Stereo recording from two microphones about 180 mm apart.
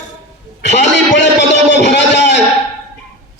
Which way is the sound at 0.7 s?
75° left (ahead or behind).